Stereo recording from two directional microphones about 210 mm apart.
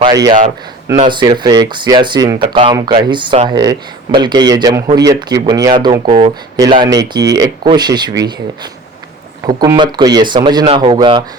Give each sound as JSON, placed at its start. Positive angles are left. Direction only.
{"t": 0.0, "sound": "speech", "side_deg": -20}